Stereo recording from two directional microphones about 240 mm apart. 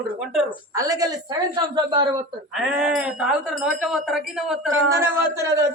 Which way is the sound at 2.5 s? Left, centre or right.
Centre.